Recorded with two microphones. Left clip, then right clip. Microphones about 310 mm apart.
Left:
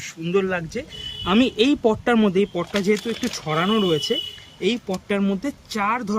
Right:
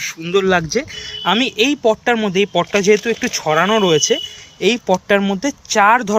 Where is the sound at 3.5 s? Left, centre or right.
Centre.